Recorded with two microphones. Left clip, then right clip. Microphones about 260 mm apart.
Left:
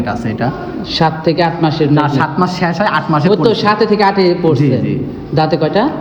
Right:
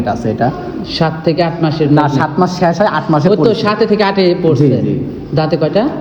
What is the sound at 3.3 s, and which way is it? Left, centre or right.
A man's voice, centre.